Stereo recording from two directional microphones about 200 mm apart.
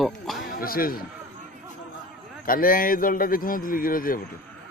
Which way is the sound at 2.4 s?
45° left (ahead or behind).